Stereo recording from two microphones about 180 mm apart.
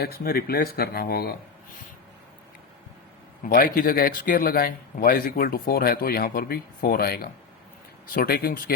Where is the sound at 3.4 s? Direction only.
50° left (ahead or behind).